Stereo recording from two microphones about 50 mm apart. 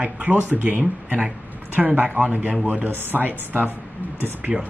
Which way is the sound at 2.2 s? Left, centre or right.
Right.